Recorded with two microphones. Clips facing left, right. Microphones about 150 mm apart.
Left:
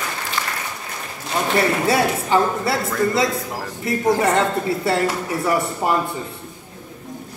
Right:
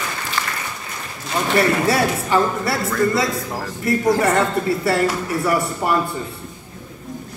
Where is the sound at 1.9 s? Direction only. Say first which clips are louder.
Even; 20° left (ahead or behind).